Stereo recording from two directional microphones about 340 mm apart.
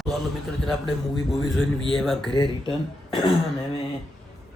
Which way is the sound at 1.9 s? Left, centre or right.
Centre.